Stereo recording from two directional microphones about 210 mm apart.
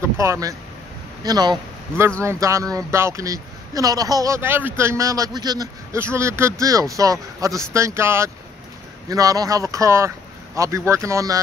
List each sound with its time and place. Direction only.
0.0 s speech: 15° right (ahead or behind)